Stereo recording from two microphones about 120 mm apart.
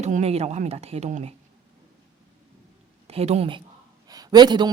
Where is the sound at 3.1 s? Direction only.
60° right (ahead or behind).